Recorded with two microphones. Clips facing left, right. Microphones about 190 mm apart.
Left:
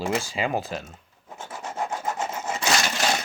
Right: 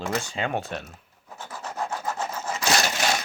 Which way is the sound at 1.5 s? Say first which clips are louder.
Left 1 dB; 20° left (ahead or behind).